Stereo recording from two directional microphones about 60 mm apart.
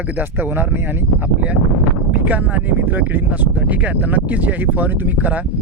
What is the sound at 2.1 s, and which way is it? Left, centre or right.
Speech, right.